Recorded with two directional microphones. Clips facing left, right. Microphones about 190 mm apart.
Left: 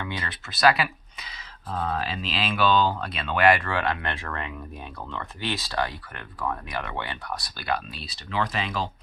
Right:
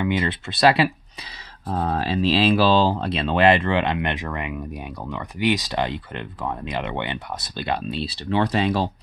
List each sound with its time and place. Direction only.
0.0 s speech: 25° right (ahead or behind)